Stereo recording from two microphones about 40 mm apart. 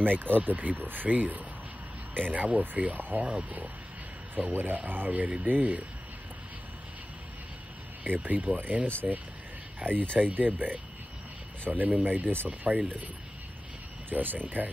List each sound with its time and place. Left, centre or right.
0.0 s speech: right
0.7 s speech: right
3.3 s speech: right
4.4 s speech: right
8.0 s speech: right
9.0 s speech: right
9.8 s speech: right
14.0 s speech: right